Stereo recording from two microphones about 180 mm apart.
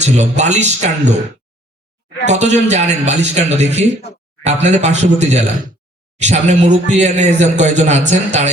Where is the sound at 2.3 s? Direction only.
40° right (ahead or behind).